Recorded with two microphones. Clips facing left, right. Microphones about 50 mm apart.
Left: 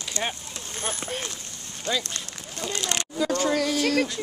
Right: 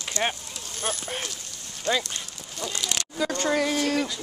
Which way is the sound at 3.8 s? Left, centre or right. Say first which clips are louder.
Left 2 dB; left.